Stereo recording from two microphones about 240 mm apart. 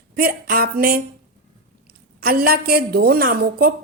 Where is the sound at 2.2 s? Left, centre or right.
Right.